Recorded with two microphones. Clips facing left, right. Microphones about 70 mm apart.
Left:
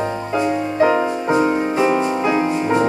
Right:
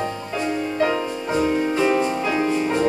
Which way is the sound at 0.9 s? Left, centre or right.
Left.